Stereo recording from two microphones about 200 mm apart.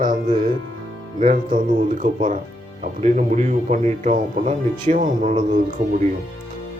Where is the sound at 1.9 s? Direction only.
40° right (ahead or behind).